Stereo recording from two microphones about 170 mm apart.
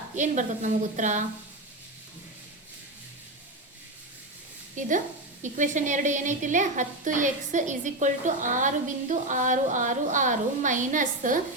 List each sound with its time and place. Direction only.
0.2 s a woman's voice: 45° right (ahead or behind)
4.8 s a woman's voice: 50° right (ahead or behind)